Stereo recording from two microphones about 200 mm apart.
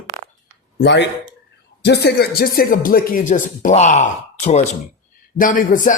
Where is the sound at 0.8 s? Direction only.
60° left (ahead or behind).